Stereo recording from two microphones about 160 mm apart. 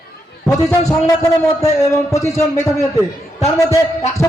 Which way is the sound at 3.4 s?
40° left (ahead or behind).